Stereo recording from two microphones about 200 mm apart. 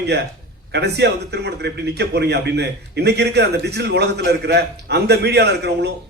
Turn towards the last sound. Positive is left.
turn(degrees=-55)  # may be behind; listen again after turning